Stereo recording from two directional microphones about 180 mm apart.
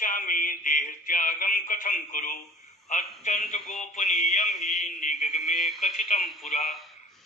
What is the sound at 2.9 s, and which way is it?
A man's voice, 40° left (ahead or behind).